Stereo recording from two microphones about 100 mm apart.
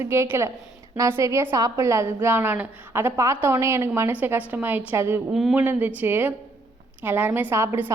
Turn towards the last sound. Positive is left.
turn(degrees=-20)  # may be behind; listen again after turning